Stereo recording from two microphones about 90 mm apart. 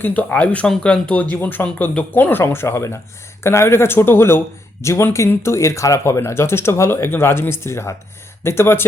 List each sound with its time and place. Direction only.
0.0 s speech: 20° left (ahead or behind)